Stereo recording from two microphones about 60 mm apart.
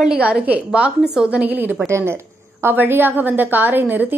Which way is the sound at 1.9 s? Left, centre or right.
Right.